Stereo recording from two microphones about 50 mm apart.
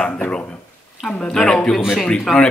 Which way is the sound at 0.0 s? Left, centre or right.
Centre.